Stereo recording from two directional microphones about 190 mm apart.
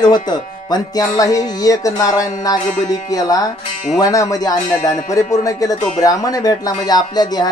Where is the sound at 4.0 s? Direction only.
20° left (ahead or behind).